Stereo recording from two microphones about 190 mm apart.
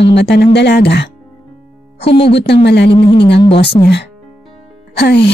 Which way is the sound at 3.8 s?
65° left (ahead or behind).